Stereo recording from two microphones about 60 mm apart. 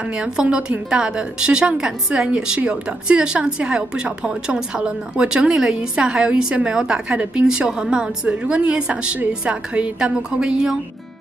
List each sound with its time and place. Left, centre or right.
0.1 s a woman's voice: centre